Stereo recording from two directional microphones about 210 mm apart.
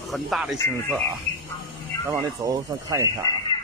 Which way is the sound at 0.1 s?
Centre (ahead or behind).